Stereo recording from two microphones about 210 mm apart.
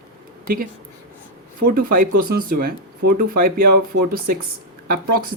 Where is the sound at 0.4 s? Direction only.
45° right (ahead or behind).